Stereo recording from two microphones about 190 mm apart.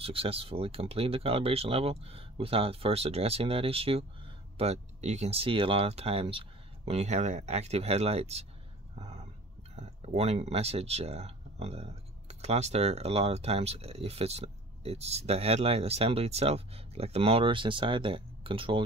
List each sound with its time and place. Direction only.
0.0 s speech: 30° right (ahead or behind)
8.9 s a sound: 30° right (ahead or behind)
9.8 s speech: 35° right (ahead or behind)